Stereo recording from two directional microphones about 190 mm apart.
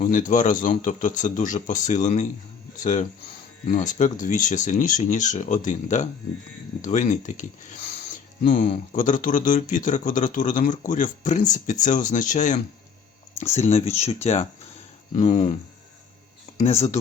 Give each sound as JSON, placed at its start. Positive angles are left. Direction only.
{"t": 0.0, "sound": "speech", "side_deg": 45}
{"t": 3.7, "sound": "speech", "side_deg": 40}
{"t": 16.6, "sound": "speech", "side_deg": 35}